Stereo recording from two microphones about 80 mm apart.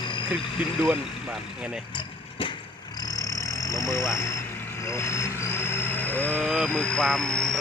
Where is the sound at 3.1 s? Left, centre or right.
Left.